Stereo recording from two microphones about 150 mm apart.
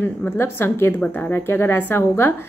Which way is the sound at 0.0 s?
15° left (ahead or behind).